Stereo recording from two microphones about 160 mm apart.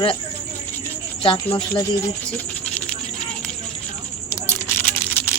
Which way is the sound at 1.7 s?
20° left (ahead or behind).